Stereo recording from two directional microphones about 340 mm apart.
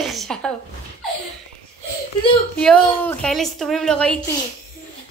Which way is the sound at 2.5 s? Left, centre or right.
Centre.